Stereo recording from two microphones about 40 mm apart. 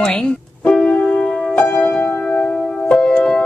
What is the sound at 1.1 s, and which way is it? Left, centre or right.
Music, centre.